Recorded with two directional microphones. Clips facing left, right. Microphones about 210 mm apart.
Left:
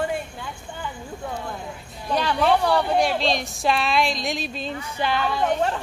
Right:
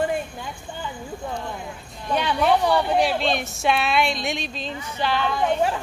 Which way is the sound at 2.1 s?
10° right (ahead or behind).